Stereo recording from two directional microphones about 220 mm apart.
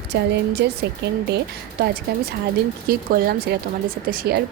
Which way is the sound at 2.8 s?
45° right (ahead or behind).